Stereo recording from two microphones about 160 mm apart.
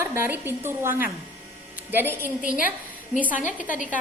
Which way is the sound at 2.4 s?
60° left (ahead or behind).